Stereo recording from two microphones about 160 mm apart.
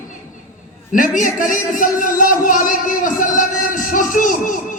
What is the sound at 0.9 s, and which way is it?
A woman's voice, 55° left (ahead or behind).